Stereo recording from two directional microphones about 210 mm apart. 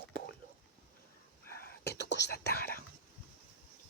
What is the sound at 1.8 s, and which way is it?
Whispering, 55° left (ahead or behind).